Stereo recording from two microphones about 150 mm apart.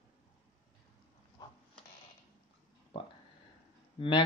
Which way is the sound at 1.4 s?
25° left (ahead or behind).